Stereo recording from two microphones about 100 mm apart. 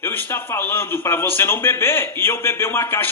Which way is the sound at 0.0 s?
20° left (ahead or behind).